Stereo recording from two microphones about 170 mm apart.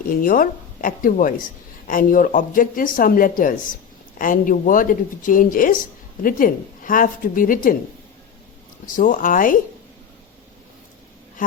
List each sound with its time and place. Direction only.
0.1 s speech: 55° left (ahead or behind)
9.0 s speech: 50° left (ahead or behind)
11.4 s speech: 50° left (ahead or behind)